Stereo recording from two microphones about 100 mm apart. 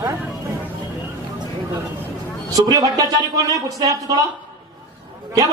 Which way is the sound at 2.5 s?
35° right (ahead or behind).